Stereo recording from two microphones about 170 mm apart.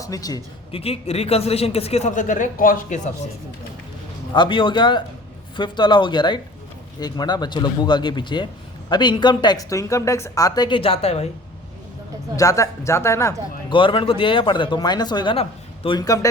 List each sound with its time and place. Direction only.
0.0 s speech: 20° left (ahead or behind)
0.7 s a man's voice: 35° left (ahead or behind)
4.4 s speech: 30° left (ahead or behind)
12.4 s speech: 20° left (ahead or behind)
13.7 s speech: 30° left (ahead or behind)